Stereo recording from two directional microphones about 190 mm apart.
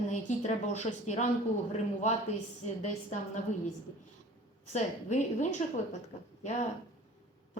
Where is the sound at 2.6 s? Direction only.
40° left (ahead or behind).